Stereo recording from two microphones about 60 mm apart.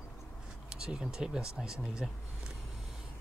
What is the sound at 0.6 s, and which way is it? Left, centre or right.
Speech, centre.